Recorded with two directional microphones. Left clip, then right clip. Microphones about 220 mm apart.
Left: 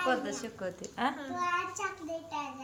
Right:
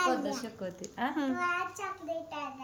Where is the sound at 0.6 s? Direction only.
10° right (ahead or behind).